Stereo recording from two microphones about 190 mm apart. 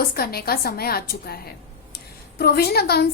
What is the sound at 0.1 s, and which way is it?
A woman's voice, 50° left (ahead or behind).